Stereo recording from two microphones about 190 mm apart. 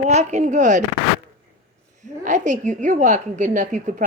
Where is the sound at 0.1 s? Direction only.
35° right (ahead or behind).